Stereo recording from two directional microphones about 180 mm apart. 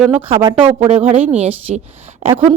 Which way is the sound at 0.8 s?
35° right (ahead or behind).